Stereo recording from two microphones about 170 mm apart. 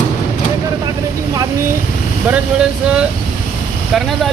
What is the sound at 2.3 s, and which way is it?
Speech, 5° right (ahead or behind).